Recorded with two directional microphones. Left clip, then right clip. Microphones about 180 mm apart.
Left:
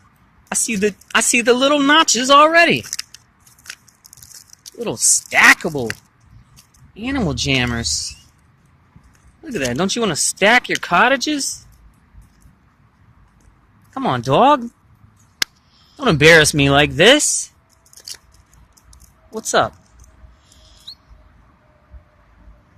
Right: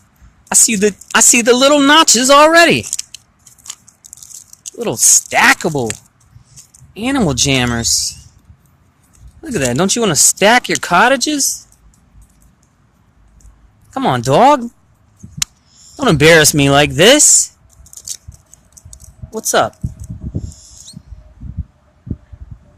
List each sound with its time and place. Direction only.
0.4 s speech: 20° right (ahead or behind)
4.8 s speech: 10° right (ahead or behind)
6.9 s speech: 20° right (ahead or behind)
9.4 s speech: 10° right (ahead or behind)
13.9 s speech: 10° right (ahead or behind)
16.0 s speech: 15° right (ahead or behind)
19.3 s speech: 10° right (ahead or behind)